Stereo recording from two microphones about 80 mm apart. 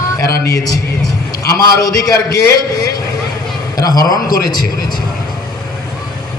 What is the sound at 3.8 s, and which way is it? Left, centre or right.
Speech, left.